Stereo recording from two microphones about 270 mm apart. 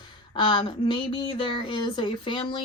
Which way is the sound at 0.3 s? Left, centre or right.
Centre.